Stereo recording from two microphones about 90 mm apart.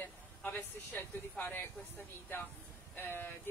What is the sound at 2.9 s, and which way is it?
Speech, 25° left (ahead or behind).